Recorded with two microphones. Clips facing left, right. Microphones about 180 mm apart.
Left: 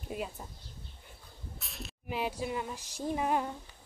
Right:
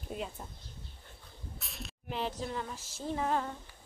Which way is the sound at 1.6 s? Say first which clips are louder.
Left 2 dB; centre (ahead or behind).